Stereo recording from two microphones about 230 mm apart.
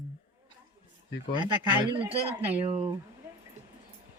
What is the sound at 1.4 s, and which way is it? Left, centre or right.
Speech, centre.